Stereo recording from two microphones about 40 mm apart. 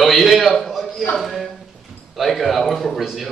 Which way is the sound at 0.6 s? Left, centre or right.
Centre.